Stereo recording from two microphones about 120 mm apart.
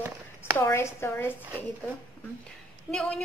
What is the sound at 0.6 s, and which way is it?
Speech, 20° left (ahead or behind).